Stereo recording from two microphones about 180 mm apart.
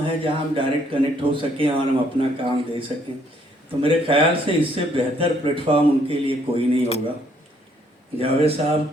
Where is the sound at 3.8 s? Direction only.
30° right (ahead or behind).